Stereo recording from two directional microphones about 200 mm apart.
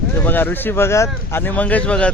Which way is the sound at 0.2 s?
10° left (ahead or behind).